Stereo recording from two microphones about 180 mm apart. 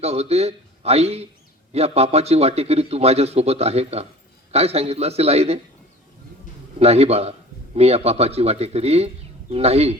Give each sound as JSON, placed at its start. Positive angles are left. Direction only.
{"t": 0.0, "sound": "a man's voice", "side_deg": -35}
{"t": 6.7, "sound": "a man's voice", "side_deg": -35}